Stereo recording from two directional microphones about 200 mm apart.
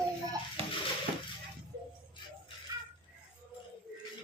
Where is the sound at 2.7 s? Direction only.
20° right (ahead or behind).